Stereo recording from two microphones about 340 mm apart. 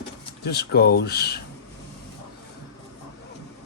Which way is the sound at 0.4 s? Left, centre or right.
Left.